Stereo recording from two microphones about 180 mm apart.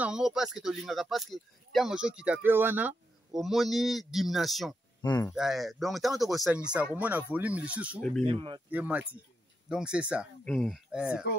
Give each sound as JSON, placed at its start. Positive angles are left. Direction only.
{"t": 0.0, "sound": "speech", "side_deg": -5}
{"t": 5.0, "sound": "speech", "side_deg": 20}
{"t": 5.3, "sound": "speech", "side_deg": 0}
{"t": 8.2, "sound": "speech", "side_deg": -30}
{"t": 8.6, "sound": "speech", "side_deg": -10}
{"t": 10.4, "sound": "speech", "side_deg": 5}